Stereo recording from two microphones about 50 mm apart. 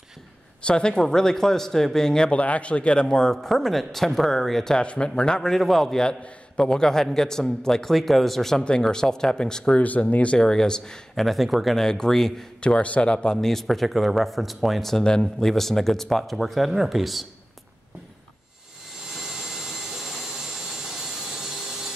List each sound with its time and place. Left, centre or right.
0.7 s a man's voice: centre
2.3 s a man's voice: left; by 4.7 s centre
4.7 s a man's voice: centre
9.8 s speech: left; by 11.0 s centre
11.1 s speech: centre
12.6 s speech: left
13.4 s speech: centre
15.0 s a man's voice: centre
15.4 s speech: centre
19.1 s jet engine: centre